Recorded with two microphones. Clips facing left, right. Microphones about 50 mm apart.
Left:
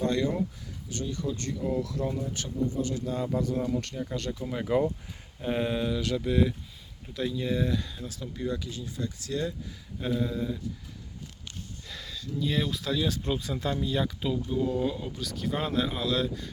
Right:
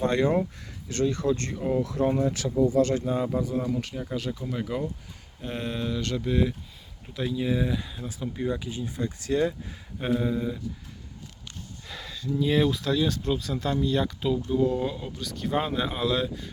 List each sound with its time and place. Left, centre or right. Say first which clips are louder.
0.0 s speech: right 4 dB; right
0.9 s speech: right 8 dB; right
1.5 s speech: right 3 dB; right; by 4.4 s centre
4.4 s speech: left 3 dB; centre; by 9.6 s right
10.2 s speech: right 1 dB; centre
11.9 s speech: right 7 dB; centre
12.7 s speech: right 3 dB; centre
15.5 s speech: right 2 dB; centre